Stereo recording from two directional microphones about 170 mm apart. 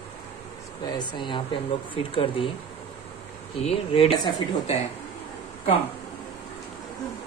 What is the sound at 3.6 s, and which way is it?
Speech, 35° left (ahead or behind).